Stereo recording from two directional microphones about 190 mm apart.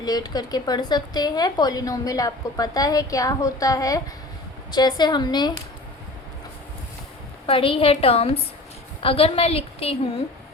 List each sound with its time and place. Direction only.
0.0 s a woman's voice: 20° left (ahead or behind)
7.4 s a woman's voice: 30° left (ahead or behind)